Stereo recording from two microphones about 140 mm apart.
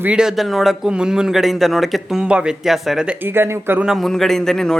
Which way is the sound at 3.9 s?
Centre (ahead or behind).